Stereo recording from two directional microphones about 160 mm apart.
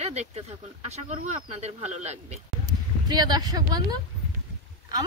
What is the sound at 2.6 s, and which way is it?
Speech, 25° right (ahead or behind).